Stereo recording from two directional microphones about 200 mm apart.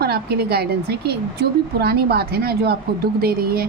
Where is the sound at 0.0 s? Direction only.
50° right (ahead or behind).